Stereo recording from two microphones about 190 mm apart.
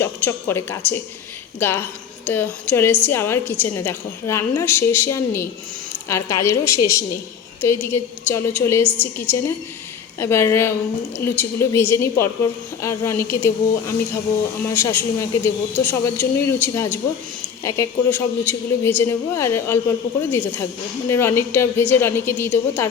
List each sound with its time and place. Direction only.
0.0 s a woman's voice: 15° left (ahead or behind)